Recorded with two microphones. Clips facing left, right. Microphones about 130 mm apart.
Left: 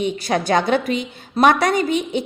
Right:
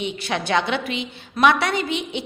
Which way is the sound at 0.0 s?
40° left (ahead or behind).